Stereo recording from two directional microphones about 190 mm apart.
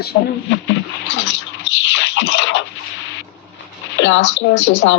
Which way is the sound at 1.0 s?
75° left (ahead or behind).